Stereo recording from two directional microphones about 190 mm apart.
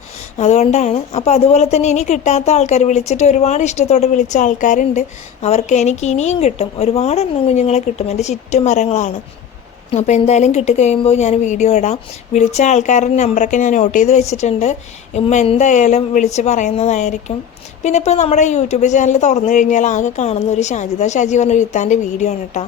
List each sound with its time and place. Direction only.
0.3 s a woman's voice: 35° left (ahead or behind)